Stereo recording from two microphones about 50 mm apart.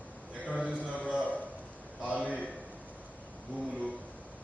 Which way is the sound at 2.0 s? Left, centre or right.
Right.